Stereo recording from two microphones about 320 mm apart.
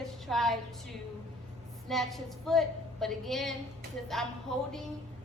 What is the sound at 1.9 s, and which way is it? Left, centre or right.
A woman's voice, centre.